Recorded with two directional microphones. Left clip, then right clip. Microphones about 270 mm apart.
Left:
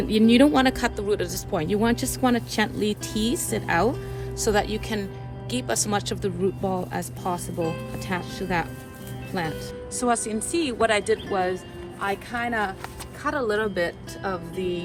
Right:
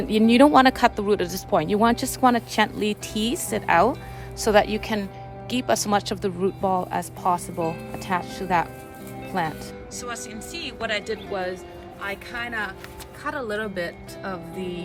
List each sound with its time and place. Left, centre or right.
0.0 s speech: right
10.0 s speech: centre
11.9 s speech: centre